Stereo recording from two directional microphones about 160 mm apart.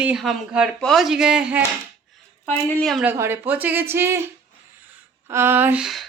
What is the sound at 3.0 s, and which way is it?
Speech, 15° right (ahead or behind).